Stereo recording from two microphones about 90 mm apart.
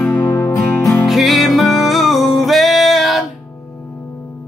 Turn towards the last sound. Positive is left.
turn(degrees=0)  # may be behind; listen again after turning